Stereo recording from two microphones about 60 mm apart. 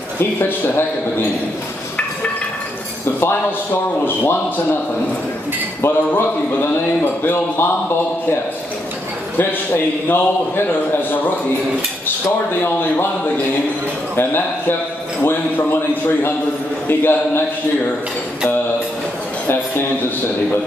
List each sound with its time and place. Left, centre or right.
0.2 s a man's voice: left
3.2 s a man's voice: left
5.8 s a man's voice: left
9.4 s a man's voice: left
15.2 s a man's voice: left